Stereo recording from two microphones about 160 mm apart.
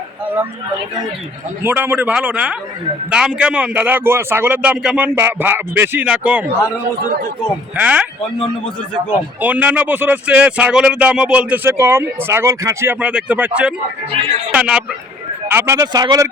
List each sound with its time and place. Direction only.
1.6 s speech: 10° right (ahead or behind)
7.8 s speech: 10° right (ahead or behind)
9.4 s speech: 10° right (ahead or behind)
14.2 s speech: 35° right (ahead or behind)
14.5 s speech: 5° right (ahead or behind); by 16.3 s 20° right (ahead or behind)